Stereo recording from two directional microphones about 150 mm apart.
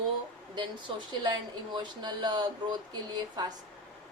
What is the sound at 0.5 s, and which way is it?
Speech, 30° right (ahead or behind).